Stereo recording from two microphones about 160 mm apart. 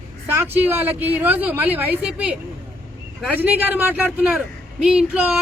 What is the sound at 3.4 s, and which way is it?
A man's voice, 10° right (ahead or behind).